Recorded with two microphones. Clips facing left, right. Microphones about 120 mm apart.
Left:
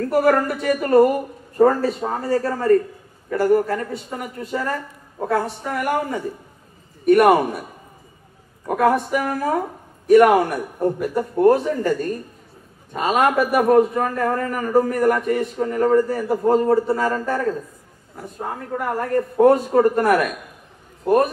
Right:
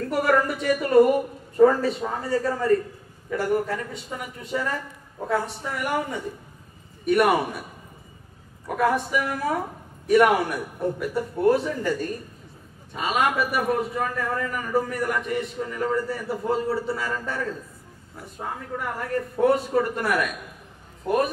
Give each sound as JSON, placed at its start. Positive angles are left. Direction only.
{"t": 0.1, "sound": "a man's voice", "side_deg": 45}
{"t": 8.6, "sound": "a man's voice", "side_deg": 45}
{"t": 12.9, "sound": "a man's voice", "side_deg": 45}
{"t": 18.8, "sound": "a man's voice", "side_deg": 45}